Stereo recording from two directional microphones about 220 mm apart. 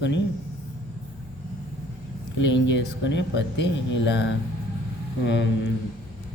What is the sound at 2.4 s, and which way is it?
A man's voice, 55° left (ahead or behind).